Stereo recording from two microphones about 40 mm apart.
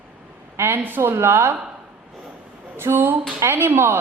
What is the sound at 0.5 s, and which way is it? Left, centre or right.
A woman's voice, right.